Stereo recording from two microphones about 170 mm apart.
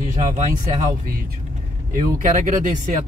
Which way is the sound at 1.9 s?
50° right (ahead or behind).